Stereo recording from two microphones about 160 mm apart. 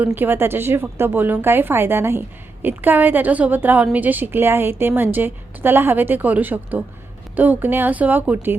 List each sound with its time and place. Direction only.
0.0 s a woman's voice: 10° right (ahead or behind)